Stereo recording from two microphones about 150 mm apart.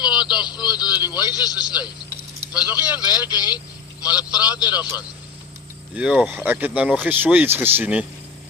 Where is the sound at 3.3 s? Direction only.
25° left (ahead or behind).